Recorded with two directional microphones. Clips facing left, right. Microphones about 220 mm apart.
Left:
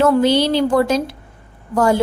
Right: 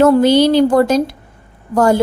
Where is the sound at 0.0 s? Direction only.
45° right (ahead or behind).